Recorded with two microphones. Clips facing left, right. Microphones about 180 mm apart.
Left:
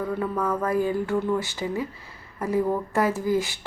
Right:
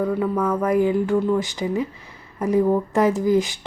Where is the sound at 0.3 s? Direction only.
Centre (ahead or behind).